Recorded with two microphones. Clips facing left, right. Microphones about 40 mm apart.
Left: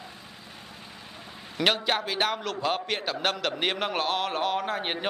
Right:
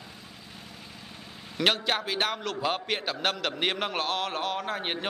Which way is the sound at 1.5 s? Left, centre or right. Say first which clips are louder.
Left 1 dB; centre.